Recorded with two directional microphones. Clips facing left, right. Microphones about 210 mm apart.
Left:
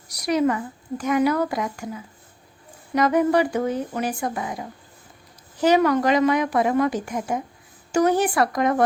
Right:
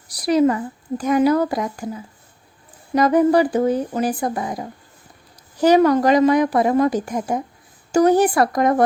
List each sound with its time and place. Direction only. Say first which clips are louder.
0.1 s a woman's voice: right 5 dB; 30° right (ahead or behind)